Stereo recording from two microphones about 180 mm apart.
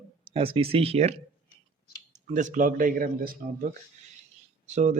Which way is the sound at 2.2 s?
45° right (ahead or behind).